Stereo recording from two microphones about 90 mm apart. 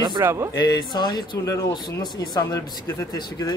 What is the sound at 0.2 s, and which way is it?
Speech, 30° right (ahead or behind).